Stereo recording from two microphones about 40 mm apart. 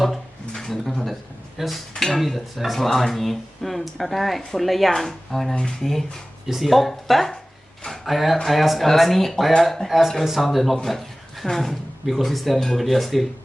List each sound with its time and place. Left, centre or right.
0.0 s a sound: centre
0.9 s speech: centre
5.5 s speech: centre
6.5 s speech: centre